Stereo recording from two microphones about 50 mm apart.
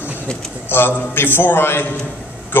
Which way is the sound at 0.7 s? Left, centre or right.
Left.